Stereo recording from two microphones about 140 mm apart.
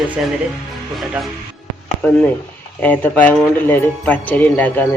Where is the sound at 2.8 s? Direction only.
10° left (ahead or behind).